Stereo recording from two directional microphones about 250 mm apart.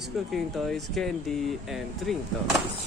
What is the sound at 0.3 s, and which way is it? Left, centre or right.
Speech, centre.